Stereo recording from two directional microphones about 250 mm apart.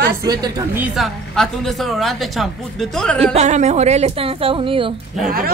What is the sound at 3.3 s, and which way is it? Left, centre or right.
Speech, right.